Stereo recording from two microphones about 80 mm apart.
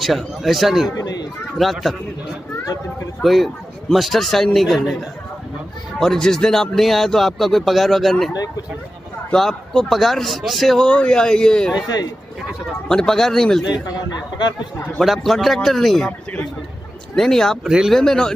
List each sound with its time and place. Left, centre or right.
0.0 s a man's voice: centre
0.9 s speech: left
1.6 s a man's voice: centre
3.2 s a man's voice: centre
5.9 s a man's voice: centre
9.3 s a man's voice: centre
11.7 s speech: left
12.8 s speech: centre
14.1 s speech: left
15.0 s a man's voice: centre
17.1 s a man's voice: centre
17.6 s speech: centre
17.9 s speech: centre